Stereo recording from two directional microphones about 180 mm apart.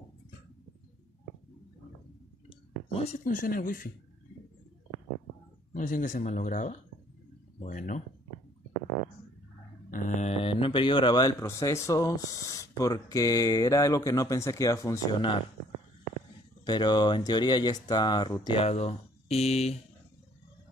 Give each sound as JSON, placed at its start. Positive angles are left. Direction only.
{"t": 2.9, "sound": "speech", "side_deg": 35}
{"t": 5.7, "sound": "speech", "side_deg": 45}
{"t": 9.8, "sound": "speech", "side_deg": 45}
{"t": 16.6, "sound": "speech", "side_deg": 25}